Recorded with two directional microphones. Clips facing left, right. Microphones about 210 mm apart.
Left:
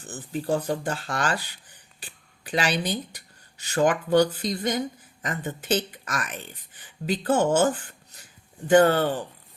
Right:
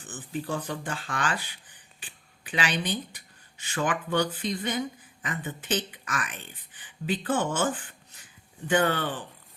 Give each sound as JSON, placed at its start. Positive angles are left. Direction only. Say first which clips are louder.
{"t": 0.0, "sound": "speech", "louder": "left 3 dB", "side_deg": 40}
{"t": 2.0, "sound": "a sound", "louder": "left 4 dB", "side_deg": 40}
{"t": 2.8, "sound": "speech", "louder": "left 2 dB", "side_deg": 40}